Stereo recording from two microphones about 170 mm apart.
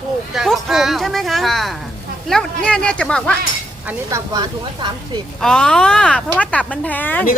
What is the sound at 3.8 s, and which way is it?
Speech, 20° right (ahead or behind).